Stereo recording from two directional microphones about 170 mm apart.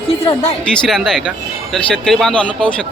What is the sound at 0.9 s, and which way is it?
A man's voice, centre (ahead or behind).